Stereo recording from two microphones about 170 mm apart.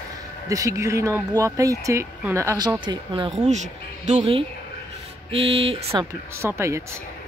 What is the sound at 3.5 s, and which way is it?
Speech, 45° right (ahead or behind).